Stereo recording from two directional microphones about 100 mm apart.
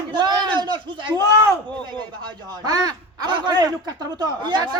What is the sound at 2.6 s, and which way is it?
A man's voice, 40° right (ahead or behind).